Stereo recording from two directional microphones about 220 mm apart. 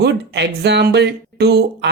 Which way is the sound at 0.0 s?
50° right (ahead or behind).